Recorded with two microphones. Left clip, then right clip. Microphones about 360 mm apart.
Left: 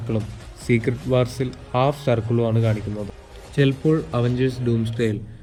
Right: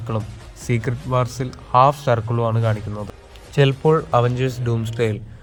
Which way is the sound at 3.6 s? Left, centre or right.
Centre.